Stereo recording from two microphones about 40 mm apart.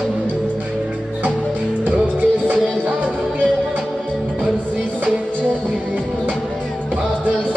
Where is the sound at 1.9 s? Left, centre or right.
Right.